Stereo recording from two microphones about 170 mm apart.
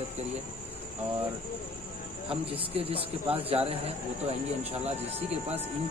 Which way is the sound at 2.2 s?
35° right (ahead or behind).